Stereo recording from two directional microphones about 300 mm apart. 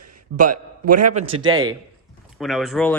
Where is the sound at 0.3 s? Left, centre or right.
Right.